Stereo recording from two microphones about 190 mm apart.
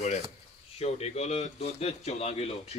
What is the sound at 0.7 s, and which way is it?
A man's voice, 35° left (ahead or behind).